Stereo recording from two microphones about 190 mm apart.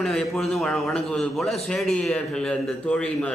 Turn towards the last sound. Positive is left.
turn(degrees=5)  # may be behind; listen again after turning